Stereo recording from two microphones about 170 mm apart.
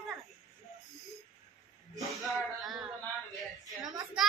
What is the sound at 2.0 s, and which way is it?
Speech, centre (ahead or behind).